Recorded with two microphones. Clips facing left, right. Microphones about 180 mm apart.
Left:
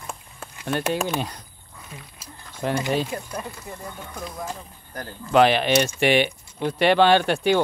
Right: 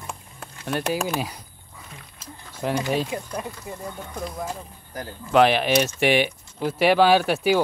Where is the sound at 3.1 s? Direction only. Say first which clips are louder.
Right 1 dB; 15° right (ahead or behind).